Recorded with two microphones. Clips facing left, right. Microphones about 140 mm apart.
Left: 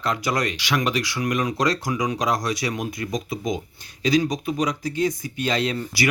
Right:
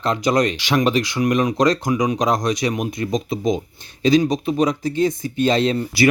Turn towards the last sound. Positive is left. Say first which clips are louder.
# right 6 dB
turn(degrees=-25)  # may be behind; listen again after turning